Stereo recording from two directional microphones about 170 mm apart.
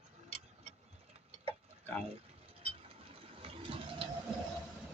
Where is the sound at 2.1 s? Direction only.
35° right (ahead or behind).